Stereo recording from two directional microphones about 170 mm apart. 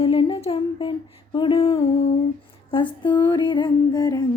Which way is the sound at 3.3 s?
25° left (ahead or behind).